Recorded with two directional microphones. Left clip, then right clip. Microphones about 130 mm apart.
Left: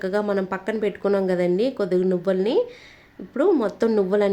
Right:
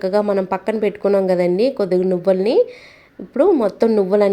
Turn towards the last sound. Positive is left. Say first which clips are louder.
# right 5 dB
turn(degrees=-20)  # may be behind; listen again after turning